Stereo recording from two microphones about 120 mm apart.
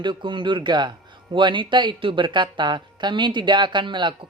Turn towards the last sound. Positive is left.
turn(degrees=-40)  # may be behind; listen again after turning